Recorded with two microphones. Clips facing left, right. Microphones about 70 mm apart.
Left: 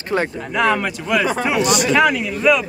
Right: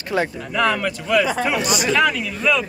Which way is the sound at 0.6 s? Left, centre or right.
Left.